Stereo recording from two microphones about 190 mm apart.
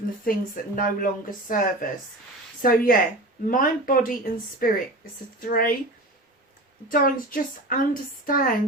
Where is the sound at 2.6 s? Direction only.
50° left (ahead or behind).